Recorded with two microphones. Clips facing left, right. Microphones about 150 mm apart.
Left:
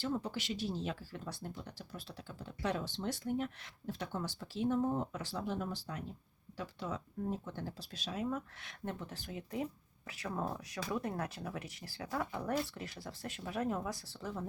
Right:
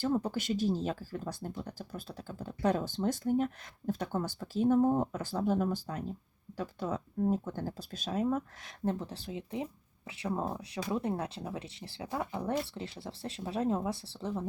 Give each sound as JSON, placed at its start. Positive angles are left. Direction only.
{"t": 0.0, "sound": "speech", "side_deg": -45}